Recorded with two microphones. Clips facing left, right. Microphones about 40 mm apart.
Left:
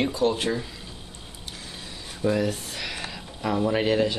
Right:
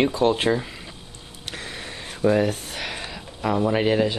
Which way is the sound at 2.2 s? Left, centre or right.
Right.